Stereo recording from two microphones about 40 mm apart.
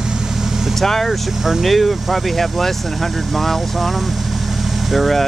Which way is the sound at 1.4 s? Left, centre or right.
Centre.